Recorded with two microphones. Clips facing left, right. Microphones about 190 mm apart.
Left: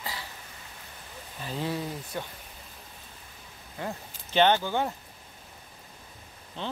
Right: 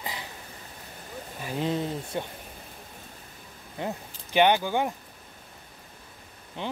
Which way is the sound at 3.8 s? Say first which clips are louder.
Right 3 dB; 15° right (ahead or behind).